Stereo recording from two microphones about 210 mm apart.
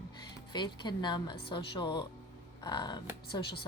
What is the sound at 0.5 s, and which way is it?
Speech, 20° left (ahead or behind).